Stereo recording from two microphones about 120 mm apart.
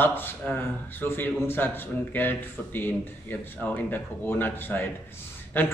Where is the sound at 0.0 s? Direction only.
15° left (ahead or behind).